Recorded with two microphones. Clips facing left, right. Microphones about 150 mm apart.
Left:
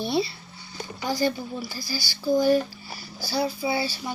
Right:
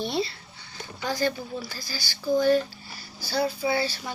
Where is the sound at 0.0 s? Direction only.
5° left (ahead or behind).